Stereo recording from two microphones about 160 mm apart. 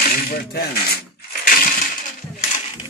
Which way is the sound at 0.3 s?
75° left (ahead or behind).